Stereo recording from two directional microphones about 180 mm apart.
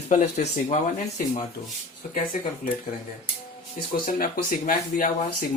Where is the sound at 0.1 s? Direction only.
40° left (ahead or behind).